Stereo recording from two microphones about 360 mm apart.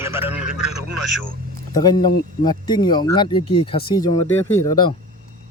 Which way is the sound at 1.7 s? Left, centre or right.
Centre.